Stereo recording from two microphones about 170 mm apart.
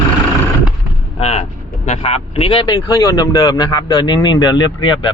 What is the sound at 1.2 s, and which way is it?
Speech, 40° left (ahead or behind).